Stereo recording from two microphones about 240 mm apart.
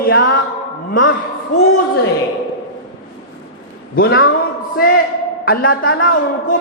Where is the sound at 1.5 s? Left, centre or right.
Left.